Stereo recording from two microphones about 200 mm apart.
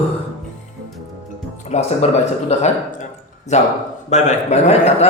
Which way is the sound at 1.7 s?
35° left (ahead or behind).